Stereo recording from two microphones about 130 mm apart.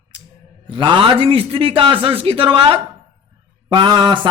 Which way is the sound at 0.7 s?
40° right (ahead or behind).